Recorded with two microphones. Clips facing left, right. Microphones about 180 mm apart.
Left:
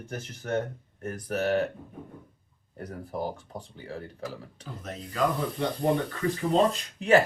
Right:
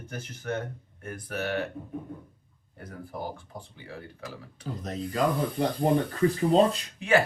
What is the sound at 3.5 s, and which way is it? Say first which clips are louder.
Speech: left 3 dB; 35° left (ahead or behind).